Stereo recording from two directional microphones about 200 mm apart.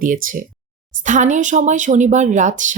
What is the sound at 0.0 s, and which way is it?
A woman's voice, 45° right (ahead or behind).